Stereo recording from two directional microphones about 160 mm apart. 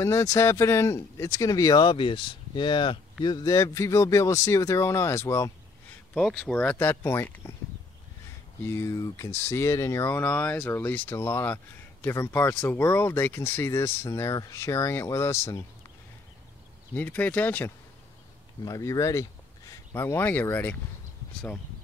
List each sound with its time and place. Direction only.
0.0 s speech: 20° left (ahead or behind)
6.1 s speech: 5° left (ahead or behind)
8.6 s speech: 20° left (ahead or behind)
16.9 s speech: 10° left (ahead or behind)
18.6 s speech: 20° left (ahead or behind)